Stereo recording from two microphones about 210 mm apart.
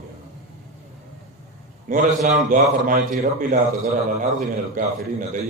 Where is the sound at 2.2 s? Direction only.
40° right (ahead or behind).